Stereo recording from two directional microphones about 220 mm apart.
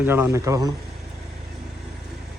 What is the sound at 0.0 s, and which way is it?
Speech, 10° right (ahead or behind).